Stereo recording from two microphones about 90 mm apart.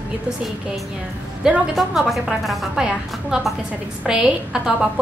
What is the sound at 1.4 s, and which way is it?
A woman's voice, 5° right (ahead or behind).